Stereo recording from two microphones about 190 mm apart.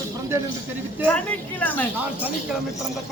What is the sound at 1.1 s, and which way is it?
Speech, 10° left (ahead or behind).